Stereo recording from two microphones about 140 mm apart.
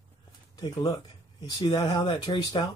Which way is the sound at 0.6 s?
30° left (ahead or behind).